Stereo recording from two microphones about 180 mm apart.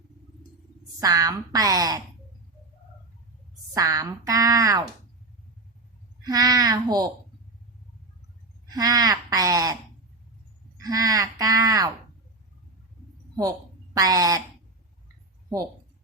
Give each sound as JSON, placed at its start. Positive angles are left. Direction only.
{"t": 1.0, "sound": "speech", "side_deg": -20}
{"t": 3.8, "sound": "speech", "side_deg": -20}
{"t": 6.2, "sound": "speech", "side_deg": -20}
{"t": 8.7, "sound": "speech", "side_deg": -20}
{"t": 10.8, "sound": "speech", "side_deg": -20}
{"t": 13.9, "sound": "speech", "side_deg": -20}